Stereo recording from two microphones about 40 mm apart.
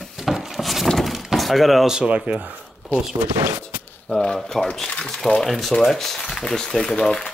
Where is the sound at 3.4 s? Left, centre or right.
Right.